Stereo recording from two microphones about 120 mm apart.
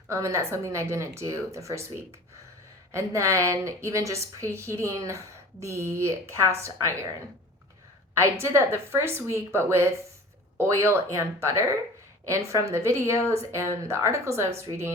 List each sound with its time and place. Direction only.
0.1 s speech: 25° right (ahead or behind)
8.1 s speech: 20° right (ahead or behind)